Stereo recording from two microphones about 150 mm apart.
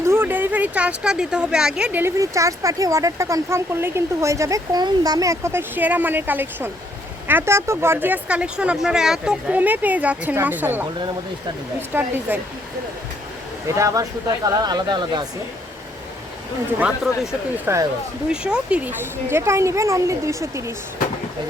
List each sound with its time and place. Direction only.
0.0 s speech: 15° right (ahead or behind)
11.9 s speech: 15° right (ahead or behind)
13.7 s speech: 20° right (ahead or behind)
17.7 s speech: 15° right (ahead or behind)
18.3 s speech: 5° right (ahead or behind)